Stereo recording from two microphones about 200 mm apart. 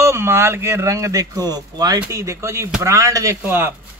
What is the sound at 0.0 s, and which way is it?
Speech, 15° right (ahead or behind).